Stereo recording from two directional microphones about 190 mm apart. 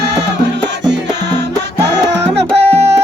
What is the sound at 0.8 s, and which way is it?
Music, 65° right (ahead or behind).